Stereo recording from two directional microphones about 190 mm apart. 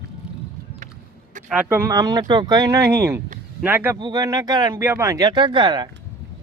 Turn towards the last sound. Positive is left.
turn(degrees=-25)  # may be behind; listen again after turning